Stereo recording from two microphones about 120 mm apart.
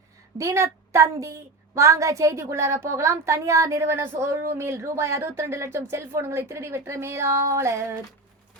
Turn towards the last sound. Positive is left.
turn(degrees=-25)  # may be behind; listen again after turning